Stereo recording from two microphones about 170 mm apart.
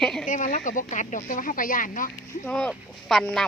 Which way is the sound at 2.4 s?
5° left (ahead or behind).